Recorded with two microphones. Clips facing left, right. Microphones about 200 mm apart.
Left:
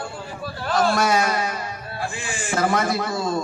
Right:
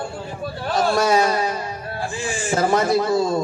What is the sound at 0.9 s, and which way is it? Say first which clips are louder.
A man's voice: right 3 dB; 30° right (ahead or behind).